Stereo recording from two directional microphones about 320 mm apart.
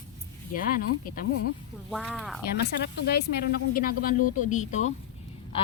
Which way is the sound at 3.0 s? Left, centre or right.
Left.